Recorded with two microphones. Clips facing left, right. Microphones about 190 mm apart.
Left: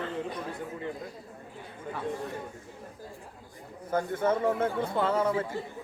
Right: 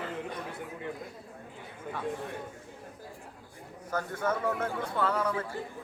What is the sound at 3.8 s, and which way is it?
A man's voice, 25° left (ahead or behind).